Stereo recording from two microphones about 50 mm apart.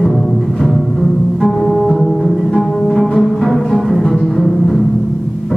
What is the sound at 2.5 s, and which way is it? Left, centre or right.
Music, centre.